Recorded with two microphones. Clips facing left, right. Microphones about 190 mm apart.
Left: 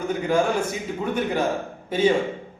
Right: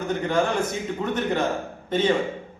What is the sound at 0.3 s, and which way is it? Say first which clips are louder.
A man's voice: left 2 dB; 10° left (ahead or behind).